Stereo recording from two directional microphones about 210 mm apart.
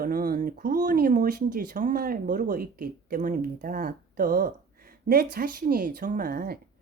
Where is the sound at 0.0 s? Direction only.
45° right (ahead or behind).